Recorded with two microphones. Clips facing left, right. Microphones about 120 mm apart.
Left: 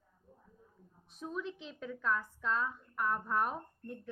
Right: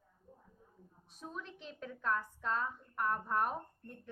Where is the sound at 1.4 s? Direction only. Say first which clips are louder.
Left 5 dB; 45° right (ahead or behind).